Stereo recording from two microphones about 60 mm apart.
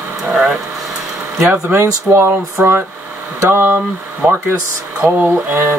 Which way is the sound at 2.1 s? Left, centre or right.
Right.